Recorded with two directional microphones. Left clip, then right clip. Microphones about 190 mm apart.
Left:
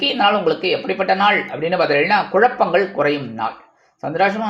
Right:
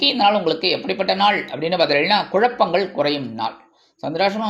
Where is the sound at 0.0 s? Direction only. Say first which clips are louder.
Even; 35° right (ahead or behind).